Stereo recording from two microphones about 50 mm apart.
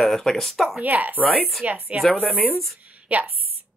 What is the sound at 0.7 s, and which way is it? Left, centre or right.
A woman's voice, right.